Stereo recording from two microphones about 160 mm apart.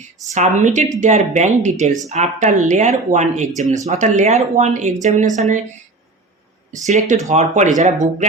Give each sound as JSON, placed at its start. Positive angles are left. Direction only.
{"t": 0.3, "sound": "speech", "side_deg": -50}
{"t": 6.8, "sound": "speech", "side_deg": -45}